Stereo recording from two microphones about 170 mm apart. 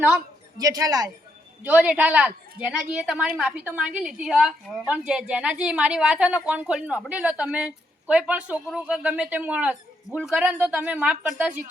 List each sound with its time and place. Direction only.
0.6 s speech: 20° right (ahead or behind)
1.6 s a woman's voice: 10° right (ahead or behind)